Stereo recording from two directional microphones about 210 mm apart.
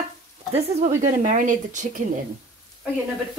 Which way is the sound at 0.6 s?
35° right (ahead or behind).